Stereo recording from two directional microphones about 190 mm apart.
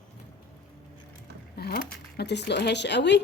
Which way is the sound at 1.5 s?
55° left (ahead or behind).